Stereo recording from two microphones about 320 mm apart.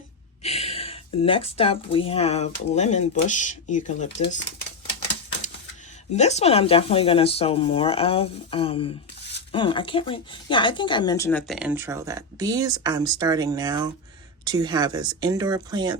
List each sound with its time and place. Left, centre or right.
0.4 s speech: centre
6.1 s speech: centre